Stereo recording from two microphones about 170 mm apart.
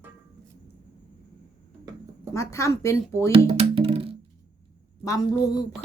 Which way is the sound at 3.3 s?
30° right (ahead or behind).